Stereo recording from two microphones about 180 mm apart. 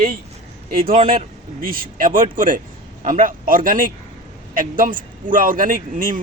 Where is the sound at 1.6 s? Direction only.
50° right (ahead or behind).